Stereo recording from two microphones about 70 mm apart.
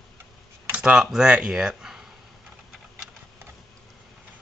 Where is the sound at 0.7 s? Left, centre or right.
Centre.